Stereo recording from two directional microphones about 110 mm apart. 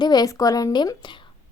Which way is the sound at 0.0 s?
40° left (ahead or behind).